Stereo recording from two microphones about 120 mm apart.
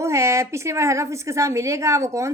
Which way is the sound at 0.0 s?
25° right (ahead or behind).